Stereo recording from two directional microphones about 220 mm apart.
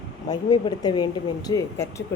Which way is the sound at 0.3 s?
20° left (ahead or behind).